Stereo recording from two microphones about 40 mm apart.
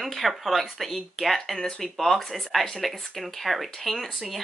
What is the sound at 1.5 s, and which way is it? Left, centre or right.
Speech, centre.